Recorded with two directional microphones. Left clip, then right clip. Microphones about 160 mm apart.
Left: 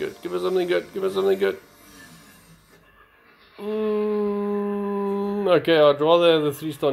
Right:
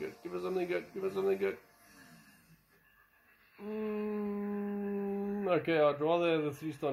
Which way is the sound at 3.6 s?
25° left (ahead or behind).